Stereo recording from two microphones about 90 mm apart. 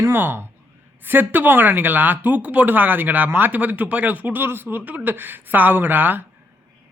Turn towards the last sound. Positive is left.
turn(degrees=-20)  # may be behind; listen again after turning